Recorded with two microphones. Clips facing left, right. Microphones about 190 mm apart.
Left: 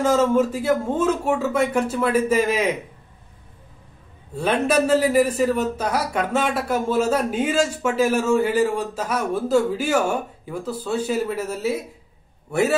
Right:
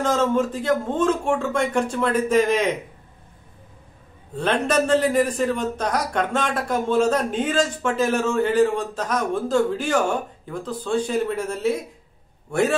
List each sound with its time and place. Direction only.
0.0 s a man's voice: 10° left (ahead or behind)
4.4 s a man's voice: 10° left (ahead or behind)